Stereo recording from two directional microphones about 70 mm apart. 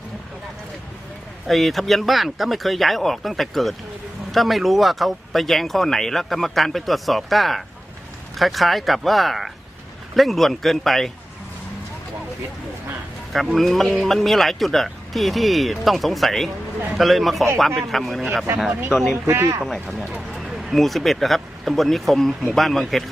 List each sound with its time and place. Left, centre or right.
1.5 s speech: centre
13.3 s speech: centre
19.1 s speech: right
19.6 s speech: centre